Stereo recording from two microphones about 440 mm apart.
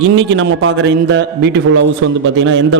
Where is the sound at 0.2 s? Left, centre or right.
Right.